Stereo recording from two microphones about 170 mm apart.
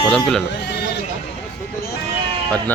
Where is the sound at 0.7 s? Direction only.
80° left.